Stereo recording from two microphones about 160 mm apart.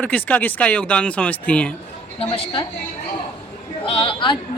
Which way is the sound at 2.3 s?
30° left (ahead or behind).